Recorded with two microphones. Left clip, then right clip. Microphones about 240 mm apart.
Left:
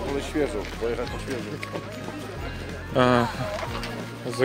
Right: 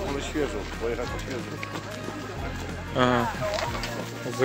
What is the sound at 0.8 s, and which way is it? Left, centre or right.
Speech, left.